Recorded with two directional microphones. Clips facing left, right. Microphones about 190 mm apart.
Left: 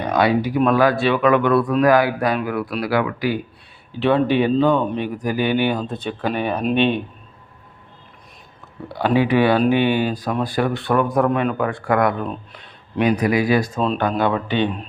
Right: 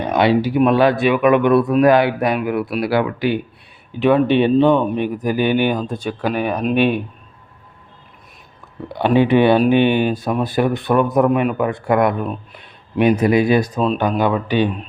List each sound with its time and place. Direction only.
0.1 s speech: 25° right (ahead or behind); by 7.0 s 10° right (ahead or behind)
8.9 s speech: 25° right (ahead or behind)
13.7 s speech: centre (ahead or behind)
14.2 s speech: 10° right (ahead or behind)